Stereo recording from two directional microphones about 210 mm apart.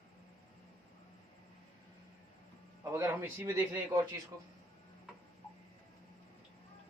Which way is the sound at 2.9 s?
10° right (ahead or behind).